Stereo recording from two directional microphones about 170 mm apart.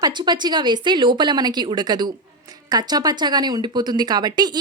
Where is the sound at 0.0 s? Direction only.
25° right (ahead or behind).